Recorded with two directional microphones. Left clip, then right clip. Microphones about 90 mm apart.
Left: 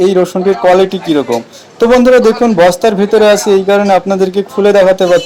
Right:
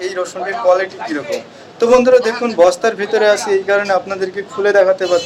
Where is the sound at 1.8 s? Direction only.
30° left (ahead or behind).